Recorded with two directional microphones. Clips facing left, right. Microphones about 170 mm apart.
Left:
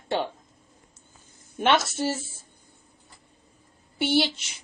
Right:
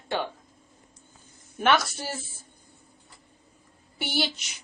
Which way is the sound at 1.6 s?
25° left (ahead or behind).